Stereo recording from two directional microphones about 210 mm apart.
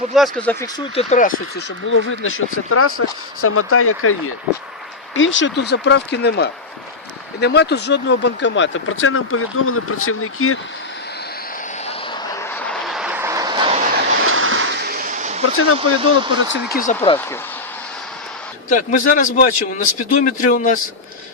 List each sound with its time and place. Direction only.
0.1 s speech: 5° left (ahead or behind)
0.9 s speech: 35° left (ahead or behind)
1.5 s speech: 65° left (ahead or behind); by 4.1 s 90° left
5.1 s speech: 65° left (ahead or behind); by 10.6 s 85° left
12.3 s vehicle: 10° left (ahead or behind); by 13.7 s 20° right (ahead or behind)
14.2 s a sound: 75° right (ahead or behind); by 15.3 s 40° right (ahead or behind)
15.5 s speech: 90° left
16.5 s speech: 45° left (ahead or behind)
18.7 s speech: 40° left (ahead or behind)